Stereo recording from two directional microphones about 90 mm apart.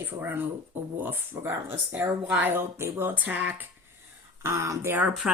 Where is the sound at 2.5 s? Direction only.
25° right (ahead or behind).